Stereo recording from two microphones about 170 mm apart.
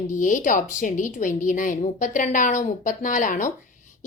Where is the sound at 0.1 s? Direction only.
50° left (ahead or behind).